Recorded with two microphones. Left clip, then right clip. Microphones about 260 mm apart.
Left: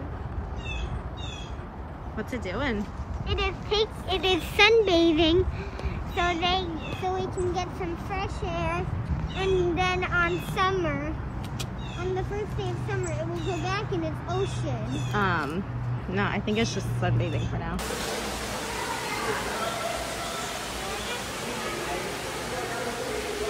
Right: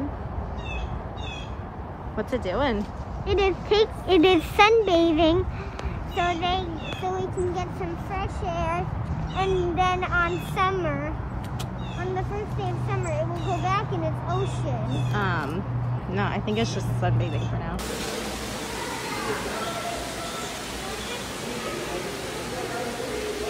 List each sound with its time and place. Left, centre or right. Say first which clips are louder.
2.1 s speech: right 6 dB; centre
3.3 s speech: right 6 dB; right
4.6 s speech: even; centre
6.1 s speech: right 1 dB; centre
13.7 s speech: right 5 dB; centre